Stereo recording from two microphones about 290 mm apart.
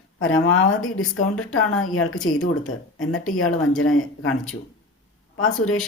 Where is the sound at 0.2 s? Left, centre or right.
Left.